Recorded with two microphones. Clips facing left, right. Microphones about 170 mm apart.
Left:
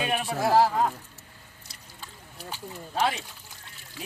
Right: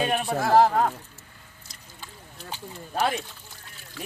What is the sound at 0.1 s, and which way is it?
Speech, 50° right (ahead or behind).